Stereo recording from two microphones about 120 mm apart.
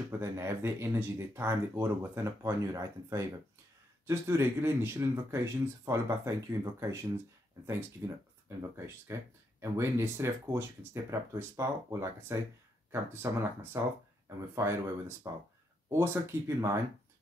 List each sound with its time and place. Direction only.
0.2 s speech: 20° right (ahead or behind)
8.0 s speech: 30° right (ahead or behind)